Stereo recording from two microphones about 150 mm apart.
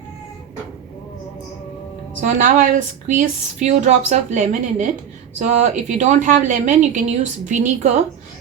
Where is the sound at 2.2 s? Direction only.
60° right (ahead or behind).